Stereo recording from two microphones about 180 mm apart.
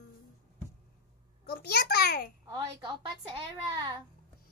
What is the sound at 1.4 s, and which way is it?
Speech, 60° left (ahead or behind).